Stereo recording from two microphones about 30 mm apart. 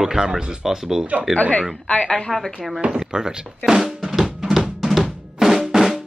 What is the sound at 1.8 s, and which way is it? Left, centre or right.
Speech, left.